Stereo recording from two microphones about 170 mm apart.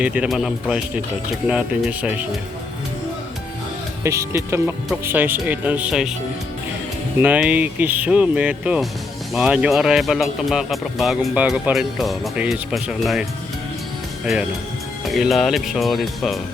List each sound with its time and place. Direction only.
0.0 s speech: 5° right (ahead or behind)
4.0 s speech: 15° right (ahead or behind)
7.2 s speech: 10° right (ahead or behind)
15.0 s speech: centre (ahead or behind)